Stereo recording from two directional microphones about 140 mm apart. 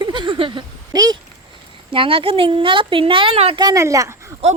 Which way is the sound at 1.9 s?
40° right (ahead or behind).